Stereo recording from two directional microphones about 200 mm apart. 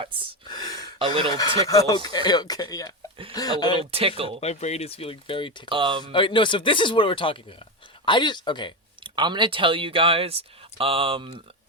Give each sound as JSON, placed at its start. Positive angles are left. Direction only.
{"t": 0.4, "sound": "a sound", "side_deg": 20}
{"t": 0.9, "sound": "speech", "side_deg": -25}
{"t": 1.3, "sound": "speech", "side_deg": 15}
{"t": 4.4, "sound": "speech", "side_deg": 30}
{"t": 5.6, "sound": "speech", "side_deg": -25}
{"t": 6.1, "sound": "speech", "side_deg": 25}
{"t": 9.0, "sound": "speech", "side_deg": -25}